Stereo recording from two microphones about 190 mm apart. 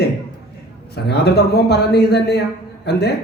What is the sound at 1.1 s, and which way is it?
Speech, 60° left (ahead or behind).